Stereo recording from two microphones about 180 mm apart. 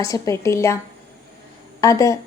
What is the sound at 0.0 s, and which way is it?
Speech, 15° left (ahead or behind).